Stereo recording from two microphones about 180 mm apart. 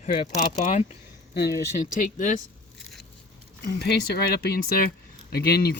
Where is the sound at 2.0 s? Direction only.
45° left (ahead or behind).